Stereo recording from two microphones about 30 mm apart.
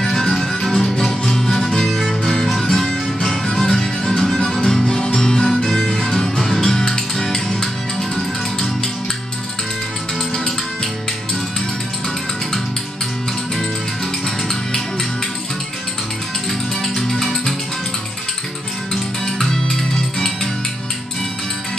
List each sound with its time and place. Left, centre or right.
0.0 s music: centre
0.9 s music: centre
1.9 s music: centre
14.2 s music: centre
16.8 s music: centre
19.2 s music: centre